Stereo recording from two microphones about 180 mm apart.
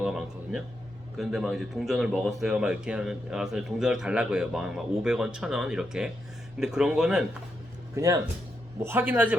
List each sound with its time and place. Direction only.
0.0 s speech: centre (ahead or behind)
7.9 s a man's voice: 15° right (ahead or behind)